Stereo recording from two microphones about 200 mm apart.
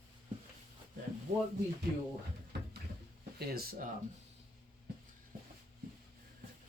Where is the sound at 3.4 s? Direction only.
50° right (ahead or behind).